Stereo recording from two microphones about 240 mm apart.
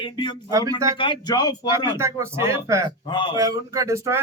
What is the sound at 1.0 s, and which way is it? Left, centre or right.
Speech, centre.